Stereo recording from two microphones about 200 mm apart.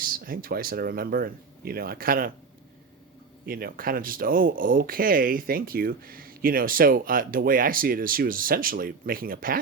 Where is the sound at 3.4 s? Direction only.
50° right (ahead or behind).